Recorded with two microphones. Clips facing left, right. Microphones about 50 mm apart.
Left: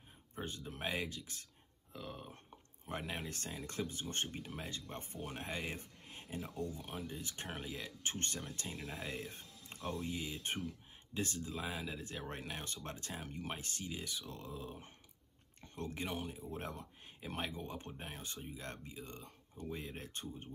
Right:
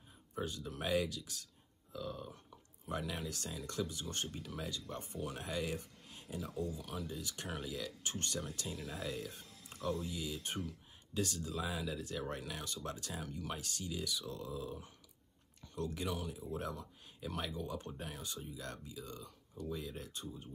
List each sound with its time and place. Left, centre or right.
0.4 s speech: left
8.7 s speech: centre
9.0 s speech: left